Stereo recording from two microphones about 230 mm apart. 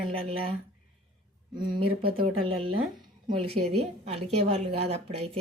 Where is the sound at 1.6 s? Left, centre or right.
Right.